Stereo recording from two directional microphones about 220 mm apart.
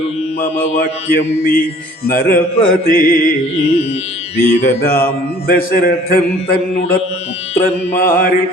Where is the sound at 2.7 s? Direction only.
40° left (ahead or behind).